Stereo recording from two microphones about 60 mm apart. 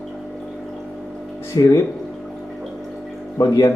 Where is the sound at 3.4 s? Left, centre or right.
Left.